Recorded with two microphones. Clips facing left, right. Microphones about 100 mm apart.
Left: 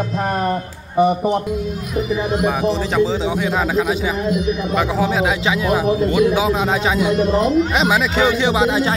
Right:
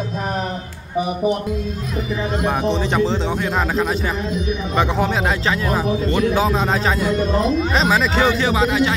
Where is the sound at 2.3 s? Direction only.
5° left (ahead or behind).